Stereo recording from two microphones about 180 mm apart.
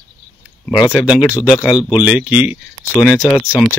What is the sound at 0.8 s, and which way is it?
Speech, 5° right (ahead or behind).